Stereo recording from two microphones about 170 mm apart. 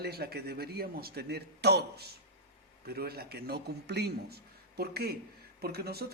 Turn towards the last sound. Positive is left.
turn(degrees=-70)  # may be behind; listen again after turning